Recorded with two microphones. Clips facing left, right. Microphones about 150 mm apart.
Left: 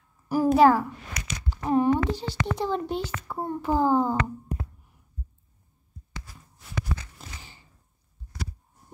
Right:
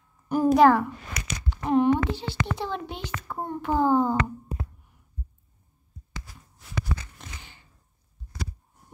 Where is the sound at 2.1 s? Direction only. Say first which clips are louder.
Left 1 dB; 40° left (ahead or behind).